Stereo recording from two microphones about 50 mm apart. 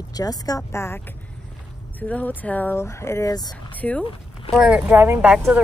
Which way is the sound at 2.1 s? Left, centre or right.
Left.